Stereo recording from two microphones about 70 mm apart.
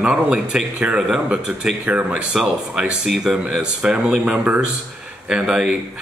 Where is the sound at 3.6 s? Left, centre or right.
Centre.